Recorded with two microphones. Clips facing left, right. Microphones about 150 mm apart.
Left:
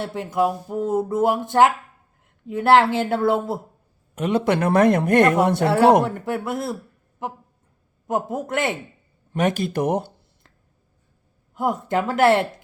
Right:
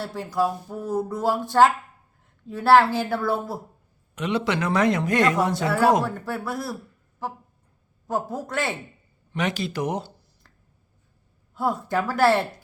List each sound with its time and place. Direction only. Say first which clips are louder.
0.0 s speech: left 3 dB; 20° left (ahead or behind)
4.1 s a man's voice: left 4 dB; 50° left (ahead or behind)
6.1 s speech: left 4 dB; 20° left (ahead or behind)
8.0 s speech: left 3 dB; 20° left (ahead or behind)
9.3 s a man's voice: left 5 dB; 50° left (ahead or behind)
11.5 s speech: left 2 dB; 15° left (ahead or behind)